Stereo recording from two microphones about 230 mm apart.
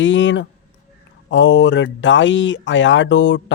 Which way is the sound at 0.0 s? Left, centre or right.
Left.